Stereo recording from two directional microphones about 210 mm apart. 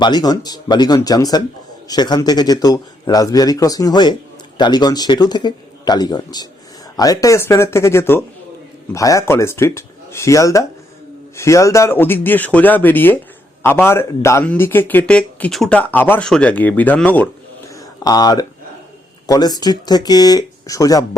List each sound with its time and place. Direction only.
0.0 s a man's voice: 20° left (ahead or behind)
17.7 s a sound: 20° left (ahead or behind)
19.3 s speech: 20° left (ahead or behind)